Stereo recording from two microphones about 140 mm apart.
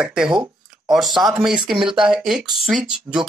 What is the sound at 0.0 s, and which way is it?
Speech, 5° right (ahead or behind).